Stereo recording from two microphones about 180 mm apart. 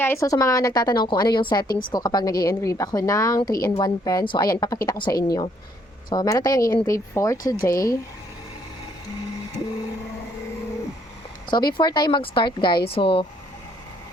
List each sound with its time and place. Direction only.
0.0 s a woman's voice: 15° left (ahead or behind)
11.5 s a woman's voice: 25° left (ahead or behind)